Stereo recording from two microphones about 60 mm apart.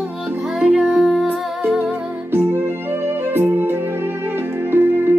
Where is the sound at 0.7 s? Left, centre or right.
Centre.